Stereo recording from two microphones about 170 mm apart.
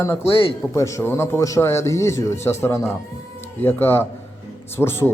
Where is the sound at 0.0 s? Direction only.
15° left (ahead or behind).